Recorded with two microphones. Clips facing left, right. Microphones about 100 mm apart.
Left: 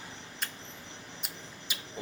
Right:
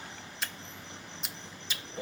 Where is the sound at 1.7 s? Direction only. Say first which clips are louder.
Even; 10° left (ahead or behind).